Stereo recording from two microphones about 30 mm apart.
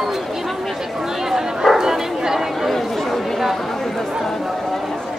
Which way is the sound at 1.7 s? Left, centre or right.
Centre.